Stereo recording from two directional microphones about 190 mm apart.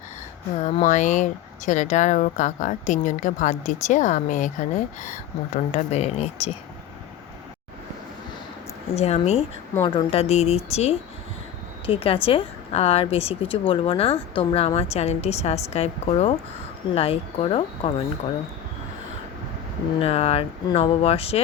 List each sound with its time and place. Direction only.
0.6 s speech: 40° left (ahead or behind)
9.0 s speech: 35° left (ahead or behind)
20.0 s speech: 30° left (ahead or behind)